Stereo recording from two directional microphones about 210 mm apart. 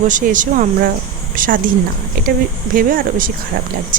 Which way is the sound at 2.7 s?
40° right (ahead or behind).